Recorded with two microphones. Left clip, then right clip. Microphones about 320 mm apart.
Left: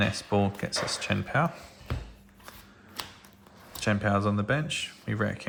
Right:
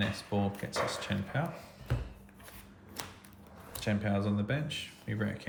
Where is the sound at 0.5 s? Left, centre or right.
Centre.